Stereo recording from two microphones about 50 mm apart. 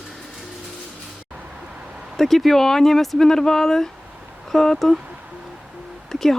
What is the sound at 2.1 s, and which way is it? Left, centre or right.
Speech, centre.